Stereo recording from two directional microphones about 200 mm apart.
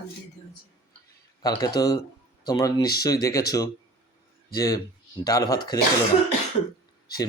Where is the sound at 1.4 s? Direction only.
20° left (ahead or behind).